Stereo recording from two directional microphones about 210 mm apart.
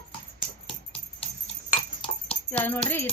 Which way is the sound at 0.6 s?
25° left (ahead or behind).